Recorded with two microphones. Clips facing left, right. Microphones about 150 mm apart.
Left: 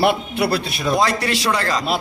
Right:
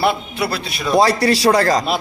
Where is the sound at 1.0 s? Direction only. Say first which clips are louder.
Right 5 dB; 35° right (ahead or behind).